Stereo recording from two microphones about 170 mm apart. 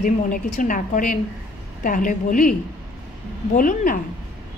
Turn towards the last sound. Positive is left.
turn(degrees=55)  # may be behind; listen again after turning